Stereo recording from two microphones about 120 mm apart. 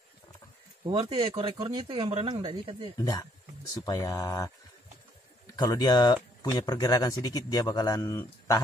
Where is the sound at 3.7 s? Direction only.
30° left (ahead or behind).